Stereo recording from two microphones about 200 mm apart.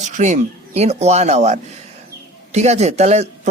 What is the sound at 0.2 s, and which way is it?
A man's voice, 35° right (ahead or behind).